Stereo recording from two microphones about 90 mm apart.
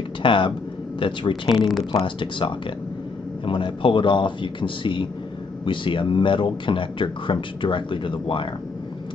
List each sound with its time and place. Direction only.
0.2 s a man's voice: 65° left (ahead or behind)